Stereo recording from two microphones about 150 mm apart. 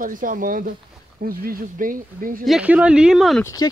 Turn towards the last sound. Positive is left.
turn(degrees=20)  # may be behind; listen again after turning